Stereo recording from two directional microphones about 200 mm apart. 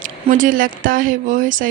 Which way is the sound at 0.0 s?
40° right (ahead or behind).